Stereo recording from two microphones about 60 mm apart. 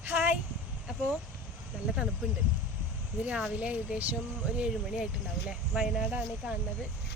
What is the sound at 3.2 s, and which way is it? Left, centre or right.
Speech, right.